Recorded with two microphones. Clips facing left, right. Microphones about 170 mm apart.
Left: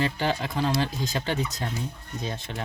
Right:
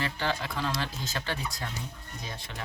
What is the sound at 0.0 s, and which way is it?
Speech, 20° left (ahead or behind).